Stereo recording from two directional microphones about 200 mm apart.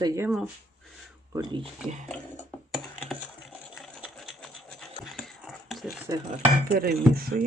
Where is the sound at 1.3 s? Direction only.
25° right (ahead or behind).